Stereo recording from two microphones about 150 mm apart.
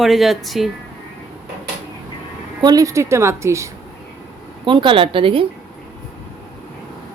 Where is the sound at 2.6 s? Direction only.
25° right (ahead or behind).